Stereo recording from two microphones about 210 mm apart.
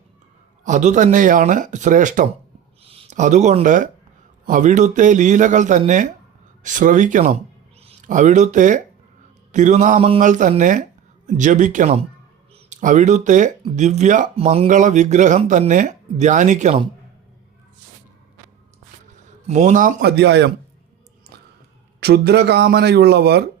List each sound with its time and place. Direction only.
0.6 s speech: 35° right (ahead or behind)
19.5 s speech: 35° right (ahead or behind); by 20.5 s 55° right (ahead or behind)
22.0 s speech: 50° right (ahead or behind)